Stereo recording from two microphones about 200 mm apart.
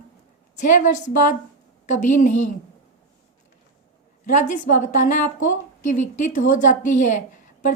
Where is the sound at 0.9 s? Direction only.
40° left (ahead or behind).